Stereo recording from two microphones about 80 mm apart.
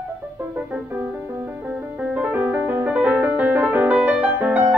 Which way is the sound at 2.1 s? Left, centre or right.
Right.